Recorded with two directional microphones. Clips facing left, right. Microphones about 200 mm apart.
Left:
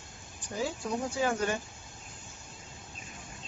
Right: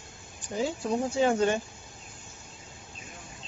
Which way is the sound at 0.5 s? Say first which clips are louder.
Right 4 dB; 20° right (ahead or behind).